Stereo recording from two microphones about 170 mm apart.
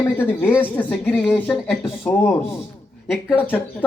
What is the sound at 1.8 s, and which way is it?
Speech, 10° left (ahead or behind).